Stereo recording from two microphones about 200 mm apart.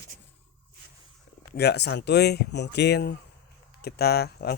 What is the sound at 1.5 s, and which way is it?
Speech, 55° left (ahead or behind).